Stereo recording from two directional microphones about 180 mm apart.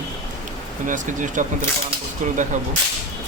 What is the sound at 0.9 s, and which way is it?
Speech, 45° right (ahead or behind).